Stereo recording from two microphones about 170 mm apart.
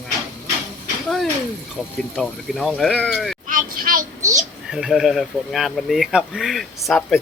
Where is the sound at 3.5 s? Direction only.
55° right (ahead or behind).